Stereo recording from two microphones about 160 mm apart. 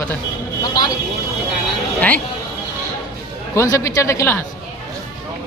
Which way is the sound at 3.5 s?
20° left (ahead or behind).